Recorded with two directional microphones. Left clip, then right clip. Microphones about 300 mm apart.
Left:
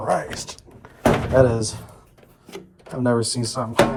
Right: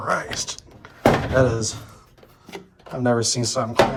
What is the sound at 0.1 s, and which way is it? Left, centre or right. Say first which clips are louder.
Speech: left 1 dB; centre.